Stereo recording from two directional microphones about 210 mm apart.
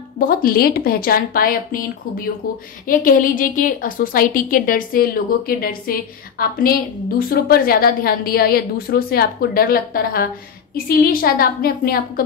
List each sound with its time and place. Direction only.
0.2 s a woman's voice: 45° left (ahead or behind)